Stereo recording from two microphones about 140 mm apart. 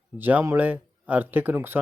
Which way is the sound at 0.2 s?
15° right (ahead or behind).